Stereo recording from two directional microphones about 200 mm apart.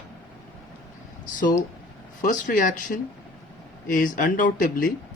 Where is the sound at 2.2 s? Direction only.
40° left (ahead or behind).